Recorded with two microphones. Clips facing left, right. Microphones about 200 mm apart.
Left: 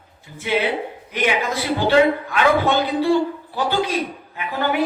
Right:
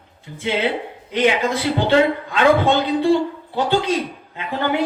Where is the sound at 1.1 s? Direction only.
20° right (ahead or behind).